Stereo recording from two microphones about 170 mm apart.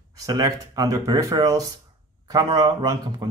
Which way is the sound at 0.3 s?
20° right (ahead or behind).